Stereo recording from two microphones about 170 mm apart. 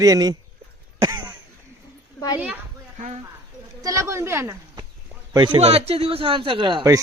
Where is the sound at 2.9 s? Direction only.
45° right (ahead or behind).